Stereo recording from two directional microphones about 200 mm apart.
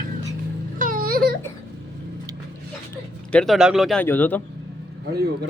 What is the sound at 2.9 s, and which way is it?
A man's voice, 5° left (ahead or behind).